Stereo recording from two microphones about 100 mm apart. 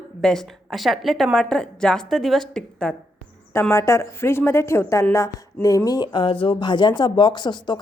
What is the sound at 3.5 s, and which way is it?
A woman's voice, 25° left (ahead or behind).